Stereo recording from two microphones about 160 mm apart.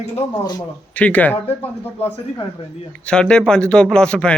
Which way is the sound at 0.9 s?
10° left (ahead or behind).